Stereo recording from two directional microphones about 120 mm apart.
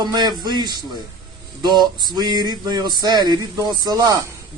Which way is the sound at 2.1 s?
35° right (ahead or behind).